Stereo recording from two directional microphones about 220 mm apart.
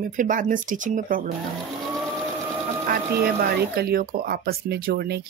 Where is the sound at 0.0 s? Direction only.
35° right (ahead or behind).